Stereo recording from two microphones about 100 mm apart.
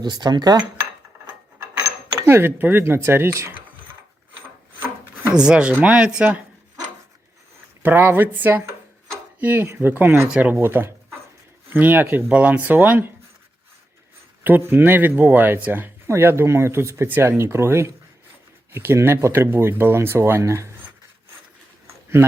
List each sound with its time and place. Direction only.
0.0 s cutlery: 45° right (ahead or behind)
2.1 s speech: 25° right (ahead or behind)
5.3 s speech: 10° right (ahead or behind)
7.8 s speech: 20° right (ahead or behind)
10.2 s speech: 10° right (ahead or behind)
10.5 s speech: 20° right (ahead or behind)
14.7 s speech: 20° right (ahead or behind)
21.8 s a sound: 25° right (ahead or behind)